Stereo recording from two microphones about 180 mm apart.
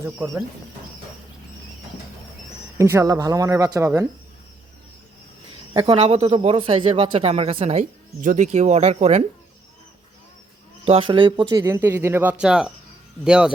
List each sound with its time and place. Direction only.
2.7 s speech: 15° right (ahead or behind)
5.7 s speech: 30° right (ahead or behind)
10.8 s speech: 30° right (ahead or behind); by 13.5 s 5° right (ahead or behind)